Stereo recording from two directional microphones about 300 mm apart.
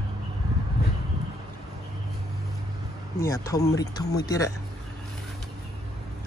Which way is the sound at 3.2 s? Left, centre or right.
Centre.